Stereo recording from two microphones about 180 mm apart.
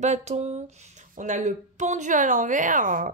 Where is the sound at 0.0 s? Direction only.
40° right (ahead or behind).